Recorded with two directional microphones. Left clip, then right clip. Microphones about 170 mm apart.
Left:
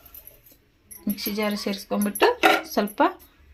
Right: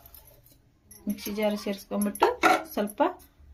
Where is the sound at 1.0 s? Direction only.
30° left (ahead or behind).